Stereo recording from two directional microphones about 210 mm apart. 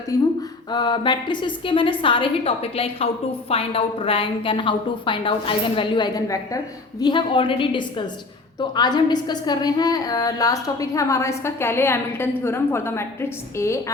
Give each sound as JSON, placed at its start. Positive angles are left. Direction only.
{"t": 0.1, "sound": "a woman's voice", "side_deg": 15}